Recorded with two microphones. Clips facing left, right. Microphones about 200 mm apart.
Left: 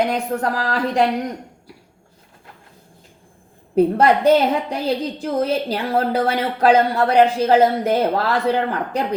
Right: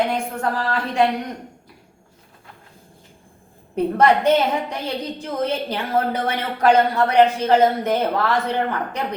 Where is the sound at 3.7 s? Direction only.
35° left (ahead or behind).